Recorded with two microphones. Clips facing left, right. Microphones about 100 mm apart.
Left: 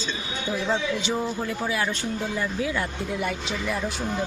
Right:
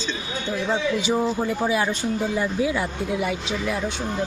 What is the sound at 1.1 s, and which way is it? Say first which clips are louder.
Speech: right 5 dB; 20° right (ahead or behind).